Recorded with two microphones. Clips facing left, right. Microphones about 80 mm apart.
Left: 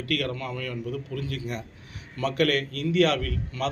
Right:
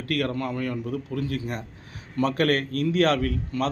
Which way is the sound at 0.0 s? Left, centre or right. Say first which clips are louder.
Right 3 dB; right.